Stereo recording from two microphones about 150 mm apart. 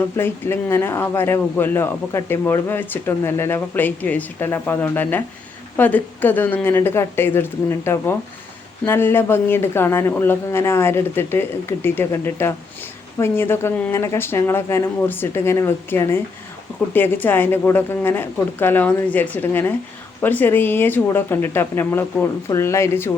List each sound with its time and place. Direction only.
0.2 s a man's voice: 15° left (ahead or behind)